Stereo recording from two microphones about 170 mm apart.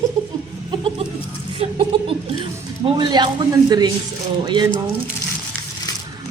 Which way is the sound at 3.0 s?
25° right (ahead or behind).